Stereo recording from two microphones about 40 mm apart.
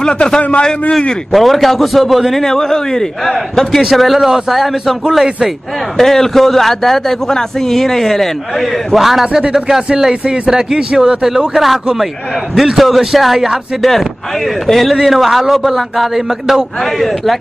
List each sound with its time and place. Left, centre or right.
0.4 s a man's voice: left
1.3 s speech: centre
2.3 s a man's voice: centre
5.9 s a man's voice: centre
9.2 s speech: centre